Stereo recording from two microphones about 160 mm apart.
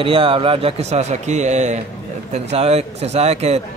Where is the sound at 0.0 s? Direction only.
35° right (ahead or behind).